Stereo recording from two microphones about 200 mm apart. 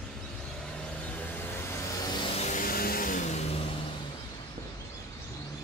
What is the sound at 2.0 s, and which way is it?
Vehicle, 25° left (ahead or behind).